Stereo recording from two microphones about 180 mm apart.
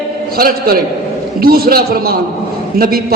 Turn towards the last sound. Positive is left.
turn(degrees=-55)  # may be behind; listen again after turning